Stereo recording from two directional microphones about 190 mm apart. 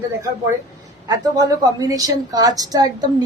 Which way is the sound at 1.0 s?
20° right (ahead or behind).